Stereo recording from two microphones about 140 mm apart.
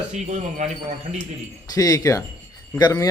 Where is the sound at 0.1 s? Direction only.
55° right (ahead or behind).